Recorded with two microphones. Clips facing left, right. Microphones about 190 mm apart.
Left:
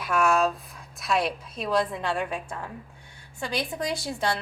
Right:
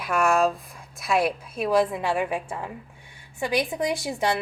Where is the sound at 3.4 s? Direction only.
20° right (ahead or behind).